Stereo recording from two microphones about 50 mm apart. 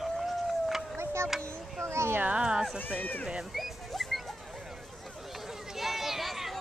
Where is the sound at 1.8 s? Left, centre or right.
Right.